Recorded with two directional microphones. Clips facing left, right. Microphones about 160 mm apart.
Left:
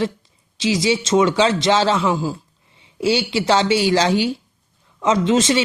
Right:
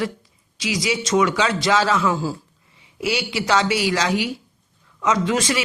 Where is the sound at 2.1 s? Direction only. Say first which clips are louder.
Left 2 dB; 15° left (ahead or behind).